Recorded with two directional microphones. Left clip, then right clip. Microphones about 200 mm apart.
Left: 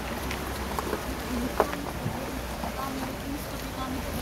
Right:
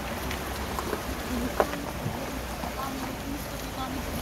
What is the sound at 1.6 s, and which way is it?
Boat, 55° left (ahead or behind).